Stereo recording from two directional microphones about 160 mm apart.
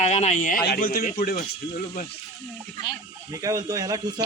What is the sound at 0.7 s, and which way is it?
Speech, 65° left (ahead or behind).